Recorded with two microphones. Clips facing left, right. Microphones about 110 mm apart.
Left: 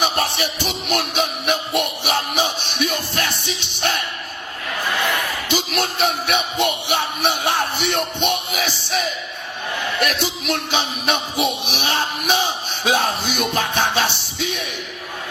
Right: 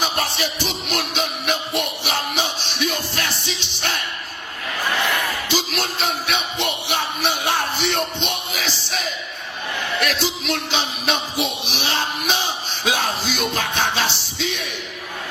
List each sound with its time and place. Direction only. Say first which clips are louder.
0.2 s music: left 2 dB; 55° left (ahead or behind)
5.5 s speech: left 2 dB; 55° left (ahead or behind)
7.8 s music: left 1 dB; 55° left (ahead or behind)